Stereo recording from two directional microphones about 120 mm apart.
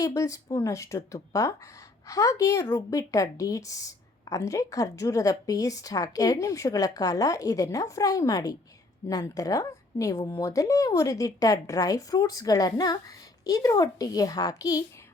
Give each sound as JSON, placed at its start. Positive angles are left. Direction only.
{"t": 0.0, "sound": "speech", "side_deg": 25}